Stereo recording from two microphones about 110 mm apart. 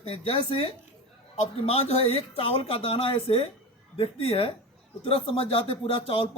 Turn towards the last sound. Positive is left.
turn(degrees=55)  # may be behind; listen again after turning